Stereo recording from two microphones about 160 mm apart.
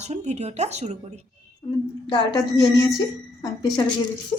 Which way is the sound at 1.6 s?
45° left (ahead or behind).